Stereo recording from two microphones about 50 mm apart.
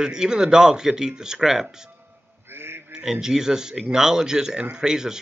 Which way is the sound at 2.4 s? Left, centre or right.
Right.